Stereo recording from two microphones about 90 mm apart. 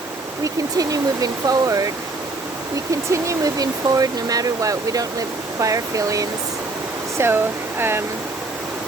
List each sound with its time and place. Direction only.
0.4 s speech: 40° right (ahead or behind)
3.1 s speech: 40° right (ahead or behind)
7.2 s speech: 30° right (ahead or behind)